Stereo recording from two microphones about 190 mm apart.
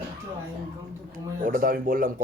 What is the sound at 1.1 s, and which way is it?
Speech, 45° right (ahead or behind).